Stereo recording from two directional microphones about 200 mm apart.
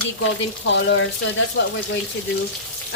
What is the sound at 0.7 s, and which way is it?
Speech, 65° left (ahead or behind).